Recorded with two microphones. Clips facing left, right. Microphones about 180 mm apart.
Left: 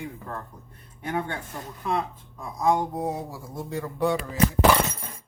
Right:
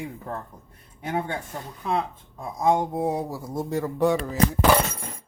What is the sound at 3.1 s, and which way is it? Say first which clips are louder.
Speech: right 5 dB; 35° right (ahead or behind).